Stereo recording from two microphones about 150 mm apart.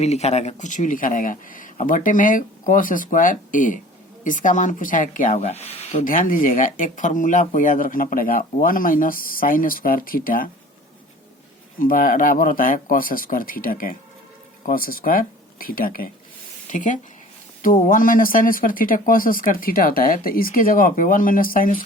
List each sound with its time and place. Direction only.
0.0 s speech: 45° left (ahead or behind)
6.1 s speech: 65° left (ahead or behind)
11.8 s speech: 65° left (ahead or behind)
16.7 s speech: 60° left (ahead or behind)